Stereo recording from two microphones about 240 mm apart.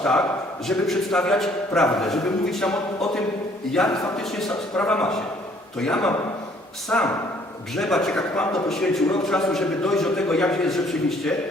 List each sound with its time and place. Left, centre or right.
0.7 s a man's voice: centre